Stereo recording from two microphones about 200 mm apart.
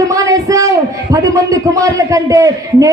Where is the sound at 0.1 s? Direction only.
15° right (ahead or behind).